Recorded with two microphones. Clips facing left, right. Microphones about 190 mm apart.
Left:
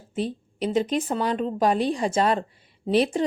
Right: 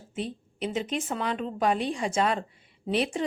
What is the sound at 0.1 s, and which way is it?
Speech, 35° left (ahead or behind).